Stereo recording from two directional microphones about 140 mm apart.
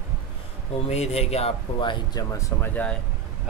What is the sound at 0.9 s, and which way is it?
A man's voice, 50° left (ahead or behind).